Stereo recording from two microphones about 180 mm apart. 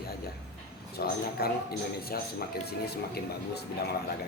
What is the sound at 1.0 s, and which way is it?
A man's voice, 55° left (ahead or behind).